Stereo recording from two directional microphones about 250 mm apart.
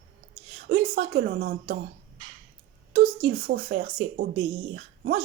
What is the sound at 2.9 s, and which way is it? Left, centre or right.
Speech, right.